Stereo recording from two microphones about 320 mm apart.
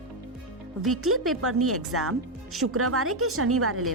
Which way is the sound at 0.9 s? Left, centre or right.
Right.